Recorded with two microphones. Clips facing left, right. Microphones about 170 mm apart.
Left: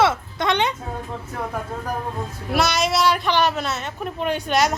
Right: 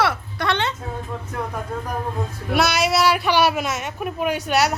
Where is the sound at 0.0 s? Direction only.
20° left (ahead or behind).